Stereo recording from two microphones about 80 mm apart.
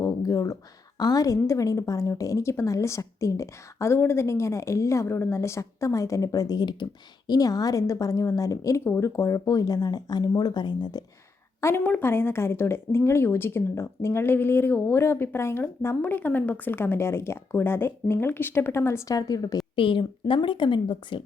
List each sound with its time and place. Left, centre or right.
0.0 s a woman's voice: left
7.3 s speech: left
8.8 s speech: left
11.8 s a woman's voice: left
19.1 s speech: left
19.7 s a woman's voice: left